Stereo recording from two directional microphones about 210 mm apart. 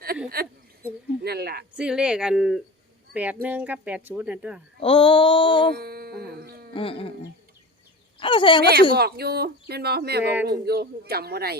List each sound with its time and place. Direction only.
0.4 s speech: 45° right (ahead or behind)
1.7 s speech: 5° right (ahead or behind)
4.8 s female singing: 25° left (ahead or behind)
5.7 s a sound: 50° right (ahead or behind)
6.7 s female singing: 25° left (ahead or behind)
8.2 s female singing: 25° left (ahead or behind)
9.0 s speech: 50° right (ahead or behind)